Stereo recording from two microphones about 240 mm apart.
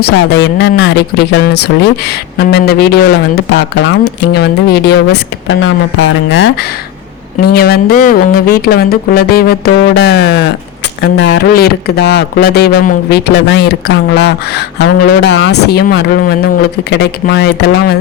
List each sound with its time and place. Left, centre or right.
0.0 s speech: left